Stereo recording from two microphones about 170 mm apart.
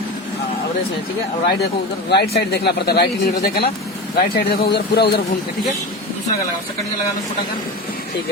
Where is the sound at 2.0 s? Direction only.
70° left (ahead or behind).